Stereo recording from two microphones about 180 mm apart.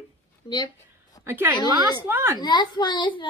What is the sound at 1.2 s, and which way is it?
Speech, 10° right (ahead or behind).